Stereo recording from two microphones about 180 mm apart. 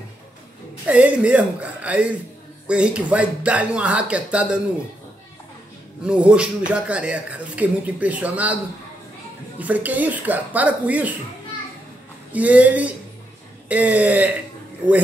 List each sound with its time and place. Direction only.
0.8 s speech: 5° right (ahead or behind)
6.0 s speech: 5° right (ahead or behind)
9.6 s speech: 10° right (ahead or behind)
12.3 s speech: 10° right (ahead or behind)